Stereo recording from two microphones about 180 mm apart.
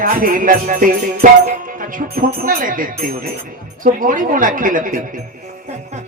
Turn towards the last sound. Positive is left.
turn(degrees=-50)  # may be behind; listen again after turning